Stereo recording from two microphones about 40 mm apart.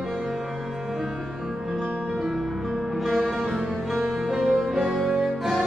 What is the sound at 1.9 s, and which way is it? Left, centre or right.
Music, left.